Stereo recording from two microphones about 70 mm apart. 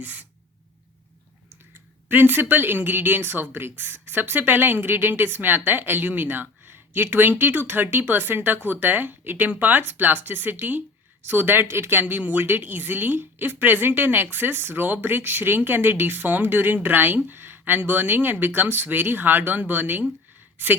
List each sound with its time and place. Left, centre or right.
0.0 s speech: right
2.0 s speech: right